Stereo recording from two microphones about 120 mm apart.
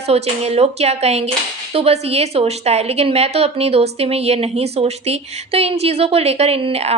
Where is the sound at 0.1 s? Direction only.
60° right (ahead or behind).